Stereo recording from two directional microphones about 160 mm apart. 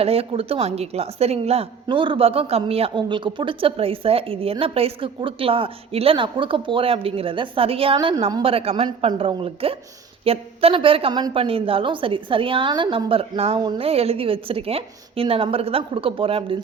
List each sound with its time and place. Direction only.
0.0 s a woman's voice: 40° right (ahead or behind)
7.9 s a woman's voice: 20° right (ahead or behind)
8.3 s a woman's voice: 35° right (ahead or behind)